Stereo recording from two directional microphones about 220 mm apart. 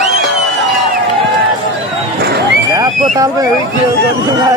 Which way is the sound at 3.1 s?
15° right (ahead or behind).